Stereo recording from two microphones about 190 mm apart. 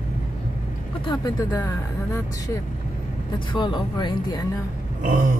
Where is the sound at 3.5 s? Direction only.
25° left (ahead or behind).